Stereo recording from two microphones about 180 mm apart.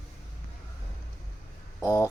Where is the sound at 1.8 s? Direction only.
15° left (ahead or behind).